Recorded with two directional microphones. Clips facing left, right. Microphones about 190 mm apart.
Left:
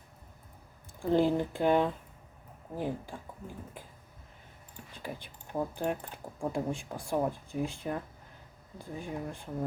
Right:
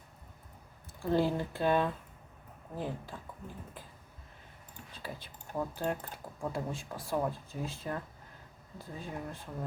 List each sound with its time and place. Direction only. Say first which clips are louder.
0.9 s speech: left 3 dB; 15° left (ahead or behind)
5.0 s speech: left 3 dB; 15° left (ahead or behind)